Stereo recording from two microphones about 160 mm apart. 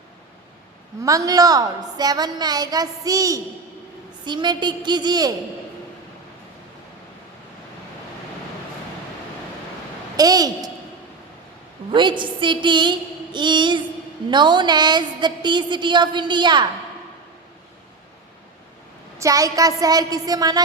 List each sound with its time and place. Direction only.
1.0 s a woman's voice: 20° right (ahead or behind)
10.2 s a woman's voice: 25° right (ahead or behind)
11.9 s a woman's voice: 30° right (ahead or behind)
19.2 s a woman's voice: 20° right (ahead or behind)